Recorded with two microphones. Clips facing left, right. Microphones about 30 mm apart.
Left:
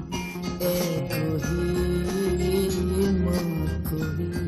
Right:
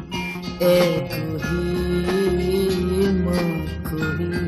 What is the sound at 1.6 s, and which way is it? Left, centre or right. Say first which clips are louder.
Music: right 3 dB; right.